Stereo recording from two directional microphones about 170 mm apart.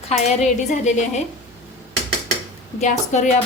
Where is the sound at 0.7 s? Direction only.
45° left (ahead or behind).